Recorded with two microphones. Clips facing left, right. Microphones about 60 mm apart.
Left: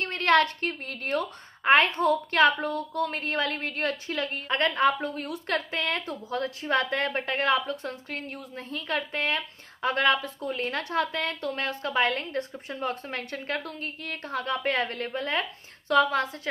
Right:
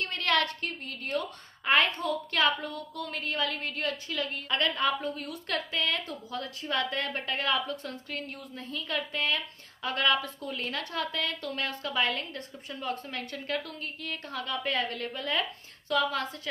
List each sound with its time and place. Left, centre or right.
0.0 s a woman's voice: left